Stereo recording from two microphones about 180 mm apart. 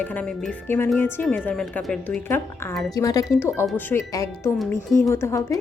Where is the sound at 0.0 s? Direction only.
10° left (ahead or behind).